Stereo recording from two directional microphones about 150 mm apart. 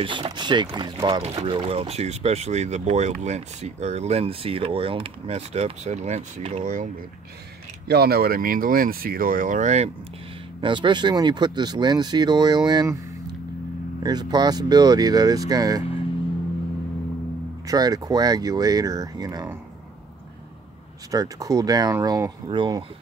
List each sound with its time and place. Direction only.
0.0 s speech: 35° right (ahead or behind)
1.2 s speech: 45° right (ahead or behind)
6.6 s speech: 60° right (ahead or behind)
7.9 s speech: 90° right; by 9.8 s 50° right (ahead or behind)
10.6 s speech: 30° right (ahead or behind)
14.0 s speech: 25° right (ahead or behind)
17.6 s speech: 25° right (ahead or behind)
21.1 s speech: 20° right (ahead or behind)